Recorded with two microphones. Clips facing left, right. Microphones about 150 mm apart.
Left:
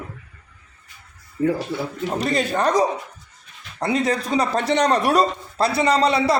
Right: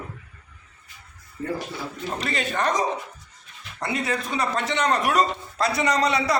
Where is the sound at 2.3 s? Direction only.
35° left (ahead or behind).